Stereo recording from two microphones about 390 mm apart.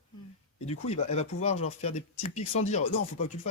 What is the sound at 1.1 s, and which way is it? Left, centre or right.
Speech, centre.